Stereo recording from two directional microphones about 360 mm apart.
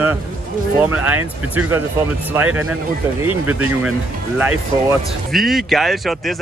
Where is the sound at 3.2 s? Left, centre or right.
Centre.